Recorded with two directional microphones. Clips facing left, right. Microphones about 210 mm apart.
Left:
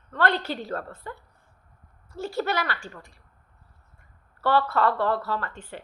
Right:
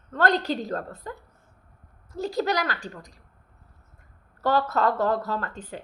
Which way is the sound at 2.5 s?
40° right (ahead or behind).